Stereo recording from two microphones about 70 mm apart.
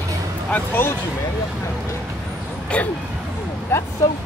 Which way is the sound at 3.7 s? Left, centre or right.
Left.